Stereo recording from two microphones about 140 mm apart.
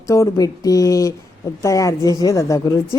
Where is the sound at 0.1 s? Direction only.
25° left (ahead or behind).